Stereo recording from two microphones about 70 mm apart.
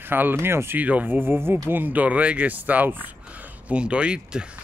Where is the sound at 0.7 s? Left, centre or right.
Right.